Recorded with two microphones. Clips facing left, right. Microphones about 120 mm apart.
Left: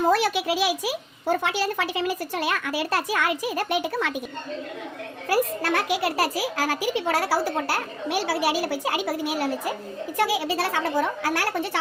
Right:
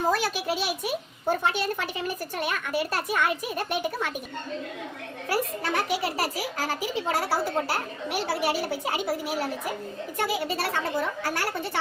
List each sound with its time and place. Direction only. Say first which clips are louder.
0.1 s a child's voice: left 4 dB; 75° left (ahead or behind)
5.6 s a child's voice: left 3 dB; 80° left